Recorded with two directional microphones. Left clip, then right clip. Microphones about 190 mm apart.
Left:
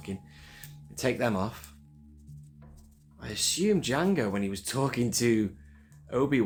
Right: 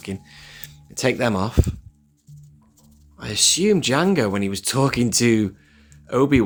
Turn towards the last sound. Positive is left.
turn(degrees=-45)  # may be behind; listen again after turning